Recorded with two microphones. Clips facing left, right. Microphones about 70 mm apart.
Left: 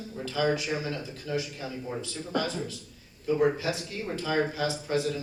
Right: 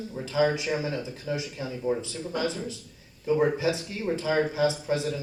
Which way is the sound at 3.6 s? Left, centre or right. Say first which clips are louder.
Right 4 dB; right.